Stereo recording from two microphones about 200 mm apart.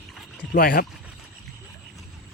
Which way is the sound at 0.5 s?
45° left (ahead or behind).